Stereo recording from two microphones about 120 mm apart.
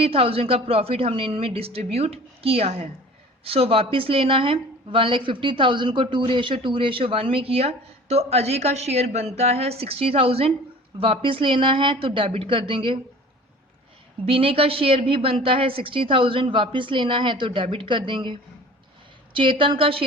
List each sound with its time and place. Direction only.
0.0 s a woman's voice: 50° right (ahead or behind)
14.3 s a woman's voice: 50° right (ahead or behind)